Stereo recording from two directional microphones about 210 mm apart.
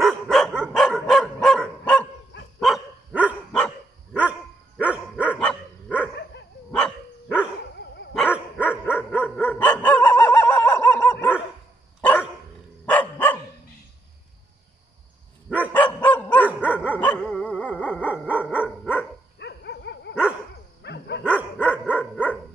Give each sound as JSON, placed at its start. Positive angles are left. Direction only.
{"t": 0.0, "sound": "dog", "side_deg": 0}
{"t": 4.7, "sound": "dog", "side_deg": -5}
{"t": 5.4, "sound": "dog", "side_deg": 5}
{"t": 8.8, "sound": "dog", "side_deg": 10}
{"t": 12.8, "sound": "dog", "side_deg": 5}
{"t": 15.7, "sound": "dog", "side_deg": 5}
{"t": 16.4, "sound": "dog", "side_deg": -5}
{"t": 17.0, "sound": "dog", "side_deg": 5}
{"t": 17.6, "sound": "dog", "side_deg": -5}
{"t": 19.3, "sound": "dog", "side_deg": 55}
{"t": 21.2, "sound": "dog", "side_deg": -5}